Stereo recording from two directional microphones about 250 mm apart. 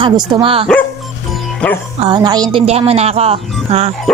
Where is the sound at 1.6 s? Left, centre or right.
Centre.